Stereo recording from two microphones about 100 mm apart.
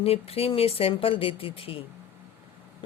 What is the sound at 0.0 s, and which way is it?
Speech, 80° left.